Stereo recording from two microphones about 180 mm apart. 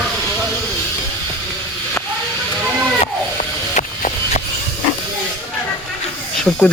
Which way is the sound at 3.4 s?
45° left (ahead or behind).